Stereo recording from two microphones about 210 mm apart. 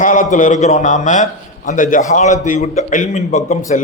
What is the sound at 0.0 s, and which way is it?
A man's voice, 35° left (ahead or behind).